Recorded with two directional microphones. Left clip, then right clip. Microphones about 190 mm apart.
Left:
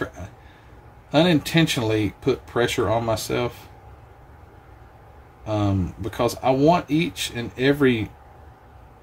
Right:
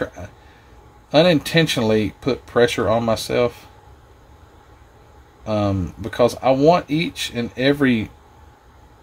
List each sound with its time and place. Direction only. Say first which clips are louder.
1.1 s speech: right 4 dB; 45° right (ahead or behind)
5.4 s speech: right 3 dB; 45° right (ahead or behind)